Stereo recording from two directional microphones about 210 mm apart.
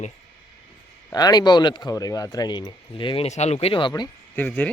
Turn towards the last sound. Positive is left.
turn(degrees=10)  # may be behind; listen again after turning